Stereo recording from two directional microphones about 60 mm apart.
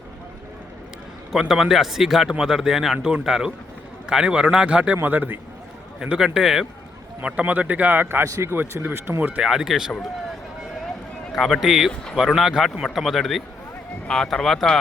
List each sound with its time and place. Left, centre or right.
1.3 s a man's voice: centre
5.0 s speech: right
6.0 s a man's voice: centre
7.2 s speech: right
8.2 s speech: right
8.4 s speech: right
9.4 s a man's voice: centre
11.3 s speech: centre
11.6 s a man's voice: centre